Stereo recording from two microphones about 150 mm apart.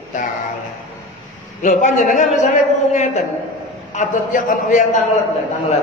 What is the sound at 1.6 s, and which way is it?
Speech, 55° left (ahead or behind).